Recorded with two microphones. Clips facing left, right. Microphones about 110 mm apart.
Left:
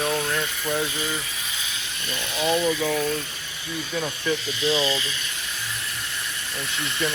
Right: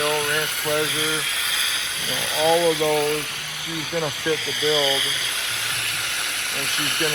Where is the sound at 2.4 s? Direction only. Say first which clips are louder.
Right 4 dB; 30° right (ahead or behind).